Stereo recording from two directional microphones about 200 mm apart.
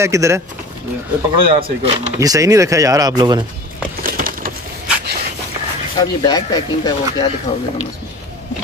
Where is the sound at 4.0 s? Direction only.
45° right (ahead or behind).